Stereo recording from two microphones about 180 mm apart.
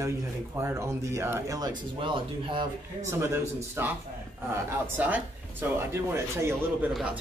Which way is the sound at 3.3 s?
15° right (ahead or behind).